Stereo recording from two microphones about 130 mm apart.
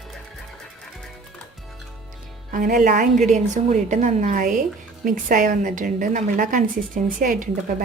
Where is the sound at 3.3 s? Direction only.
65° right (ahead or behind).